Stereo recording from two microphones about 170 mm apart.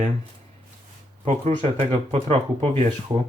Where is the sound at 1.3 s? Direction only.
40° right (ahead or behind).